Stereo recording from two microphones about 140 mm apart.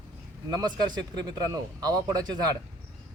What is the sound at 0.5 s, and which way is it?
Speech, 30° right (ahead or behind).